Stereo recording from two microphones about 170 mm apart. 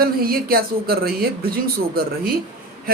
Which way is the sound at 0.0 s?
60° right (ahead or behind).